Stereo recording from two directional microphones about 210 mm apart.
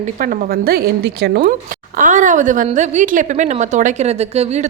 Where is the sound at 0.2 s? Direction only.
40° right (ahead or behind).